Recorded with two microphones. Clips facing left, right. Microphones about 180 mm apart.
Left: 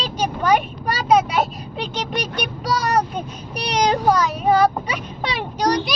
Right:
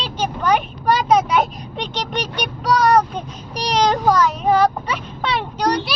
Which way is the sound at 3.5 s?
35° right (ahead or behind).